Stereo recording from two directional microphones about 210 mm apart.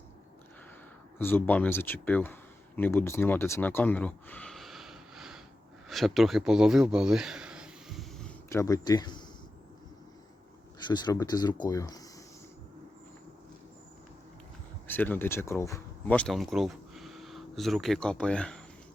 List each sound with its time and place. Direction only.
1.2 s speech: 10° left (ahead or behind)
8.4 s speech: 15° left (ahead or behind)
10.8 s speech: 20° left (ahead or behind)
14.8 s speech: 10° left (ahead or behind)